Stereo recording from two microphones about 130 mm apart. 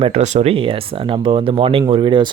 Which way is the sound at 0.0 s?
60° right (ahead or behind).